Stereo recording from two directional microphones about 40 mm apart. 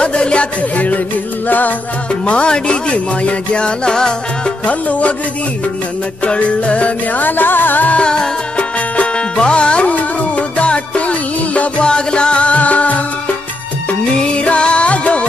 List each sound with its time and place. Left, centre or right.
0.0 s music: left
2.2 s speech: left
4.6 s music: left
6.2 s music: left
7.2 s music: left
8.0 s music: left
11.8 s music: left
13.8 s music: left